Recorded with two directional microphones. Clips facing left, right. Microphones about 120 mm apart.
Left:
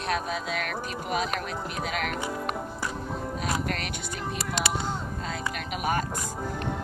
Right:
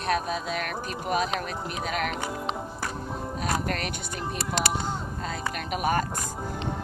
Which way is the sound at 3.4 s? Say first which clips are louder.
Right 3 dB; 45° right (ahead or behind).